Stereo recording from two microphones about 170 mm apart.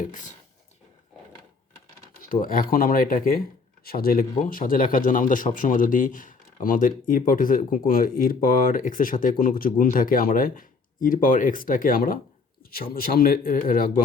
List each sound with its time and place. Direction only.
0.0 s speech: 50° left (ahead or behind)
2.3 s speech: 55° left (ahead or behind)